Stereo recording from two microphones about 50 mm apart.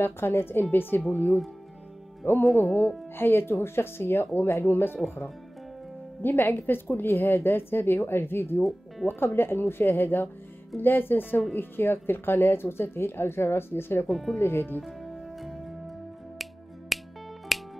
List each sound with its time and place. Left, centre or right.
0.0 s speech: left
2.5 s speech: left
6.2 s speech: left
14.0 s speech: centre
14.4 s speech: left
14.8 s music: centre
16.9 s music: centre